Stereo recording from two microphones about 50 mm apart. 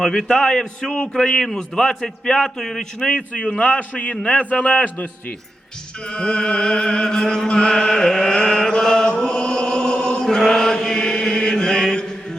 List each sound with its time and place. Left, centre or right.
0.0 s a man's voice: centre
3.1 s a man's voice: left
6.1 s chant: centre